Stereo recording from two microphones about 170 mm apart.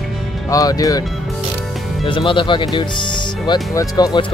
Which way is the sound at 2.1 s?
30° left (ahead or behind).